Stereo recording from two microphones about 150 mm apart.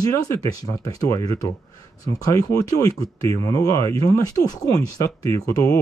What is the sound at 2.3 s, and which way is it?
Speech, 20° left (ahead or behind).